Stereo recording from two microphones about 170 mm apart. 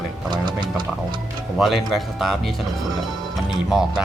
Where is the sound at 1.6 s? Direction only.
Centre (ahead or behind).